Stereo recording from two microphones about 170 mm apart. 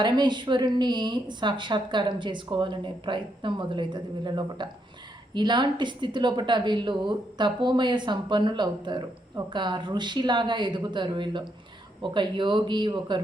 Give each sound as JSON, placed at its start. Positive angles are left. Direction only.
{"t": 0.0, "sound": "a woman's voice", "side_deg": -25}